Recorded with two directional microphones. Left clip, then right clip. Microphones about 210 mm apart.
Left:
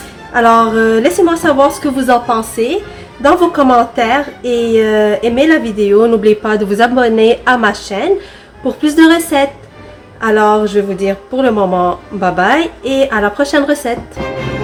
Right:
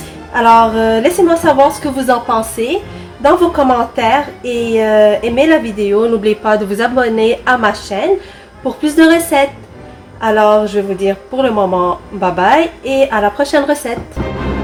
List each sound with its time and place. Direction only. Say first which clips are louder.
0.3 s a woman's voice: even; 15° left (ahead or behind)